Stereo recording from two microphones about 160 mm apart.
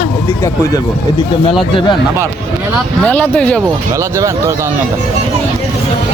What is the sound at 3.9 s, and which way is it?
Speech, 20° right (ahead or behind).